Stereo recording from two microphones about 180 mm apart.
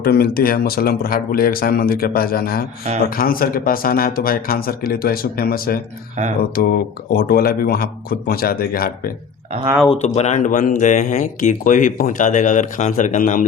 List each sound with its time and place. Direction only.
0.0 s speech: 55° left (ahead or behind)
10.0 s speech: 40° left (ahead or behind)